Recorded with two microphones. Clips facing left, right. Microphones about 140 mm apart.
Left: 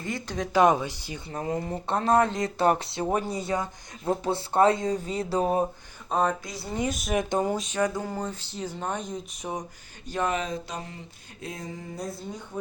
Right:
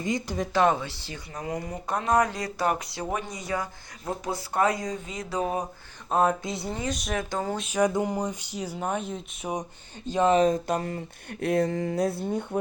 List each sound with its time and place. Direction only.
0.0 s speech: 15° right (ahead or behind)
0.5 s speech: 15° left (ahead or behind)
1.3 s speech: 30° left (ahead or behind)
6.1 s a sound: 5° right (ahead or behind)
7.1 s speech: 20° left (ahead or behind)
7.5 s music: centre (ahead or behind)
7.8 s speech: 20° right (ahead or behind); by 9.5 s 5° right (ahead or behind)
10.1 s speech: 20° right (ahead or behind)
10.3 s speech: 45° right (ahead or behind); by 12.5 s 65° right (ahead or behind)